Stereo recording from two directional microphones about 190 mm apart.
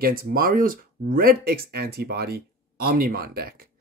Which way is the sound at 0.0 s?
50° right (ahead or behind).